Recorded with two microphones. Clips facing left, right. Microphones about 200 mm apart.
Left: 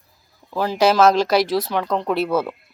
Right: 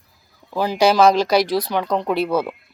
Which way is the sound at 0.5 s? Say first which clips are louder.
Right 1 dB; centre (ahead or behind).